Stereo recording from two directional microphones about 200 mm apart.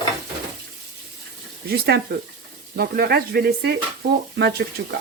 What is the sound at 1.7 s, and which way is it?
Speech, 50° right (ahead or behind).